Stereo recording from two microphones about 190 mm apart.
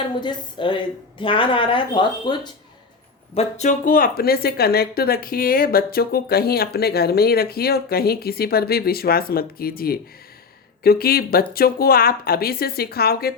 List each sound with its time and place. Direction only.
0.2 s speech: 25° left (ahead or behind)
3.3 s speech: 40° left (ahead or behind); by 13.3 s 55° left (ahead or behind)